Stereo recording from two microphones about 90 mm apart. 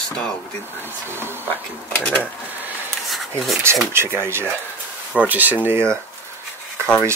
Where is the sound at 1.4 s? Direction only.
20° left (ahead or behind).